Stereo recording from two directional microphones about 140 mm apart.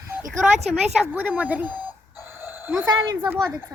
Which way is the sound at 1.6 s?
30° left (ahead or behind).